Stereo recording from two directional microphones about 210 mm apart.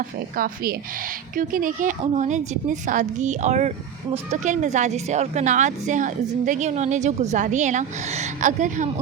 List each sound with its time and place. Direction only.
0.3 s a woman's voice: 45° right (ahead or behind)